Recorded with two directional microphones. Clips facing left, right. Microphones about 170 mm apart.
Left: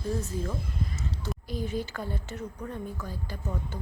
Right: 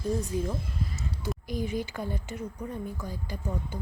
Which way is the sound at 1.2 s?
15° right (ahead or behind).